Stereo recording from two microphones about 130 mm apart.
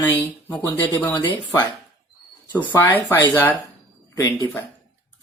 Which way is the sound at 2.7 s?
15° left (ahead or behind).